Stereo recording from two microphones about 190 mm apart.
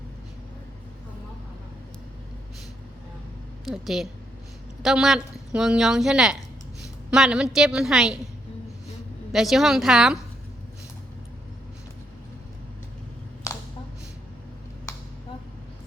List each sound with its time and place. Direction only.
3.7 s a woman's voice: centre (ahead or behind)
9.3 s a woman's voice: centre (ahead or behind)
13.5 s a sound: 15° left (ahead or behind)